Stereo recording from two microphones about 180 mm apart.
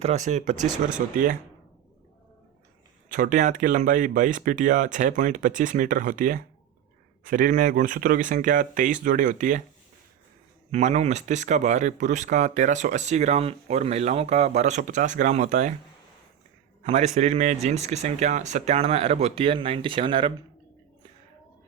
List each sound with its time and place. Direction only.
0.0 s speech: 40° right (ahead or behind)
0.5 s speech: 20° right (ahead or behind)
1.1 s speech: 50° right (ahead or behind)
3.1 s speech: 45° right (ahead or behind)
10.7 s speech: 40° right (ahead or behind)
16.8 s a man's voice: 40° right (ahead or behind)